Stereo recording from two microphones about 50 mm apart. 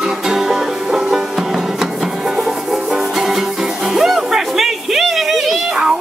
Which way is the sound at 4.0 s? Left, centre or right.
Centre.